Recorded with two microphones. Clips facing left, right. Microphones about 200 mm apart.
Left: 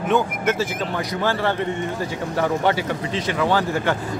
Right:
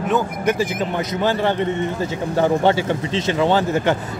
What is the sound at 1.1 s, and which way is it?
A man's voice, 20° right (ahead or behind).